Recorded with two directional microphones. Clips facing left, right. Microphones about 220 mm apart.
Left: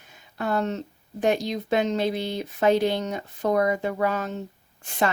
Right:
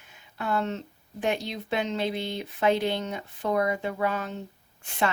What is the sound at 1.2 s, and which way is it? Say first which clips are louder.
Speech: left 5 dB; 40° left (ahead or behind).